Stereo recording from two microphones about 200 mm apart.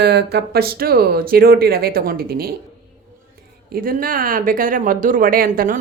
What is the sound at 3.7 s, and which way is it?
A woman's voice, 45° right (ahead or behind).